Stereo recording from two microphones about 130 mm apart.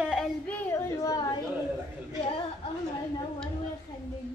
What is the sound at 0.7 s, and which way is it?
Speech, 25° left (ahead or behind).